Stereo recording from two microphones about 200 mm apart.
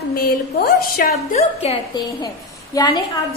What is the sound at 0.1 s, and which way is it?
A woman's voice, 45° left (ahead or behind).